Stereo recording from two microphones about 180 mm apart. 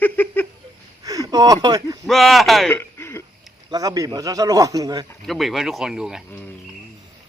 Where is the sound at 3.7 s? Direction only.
20° right (ahead or behind).